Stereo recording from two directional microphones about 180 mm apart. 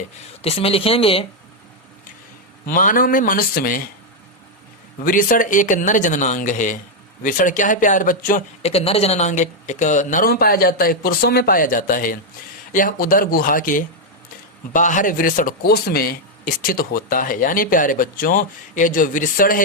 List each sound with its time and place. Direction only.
0.4 s speech: 30° left (ahead or behind)
2.6 s a man's voice: 50° left (ahead or behind)
5.0 s a man's voice: 50° left (ahead or behind)
8.7 s a man's voice: 35° left (ahead or behind); by 19.6 s 50° left (ahead or behind)